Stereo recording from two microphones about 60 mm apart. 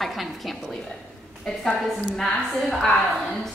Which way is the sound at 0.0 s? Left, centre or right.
Centre.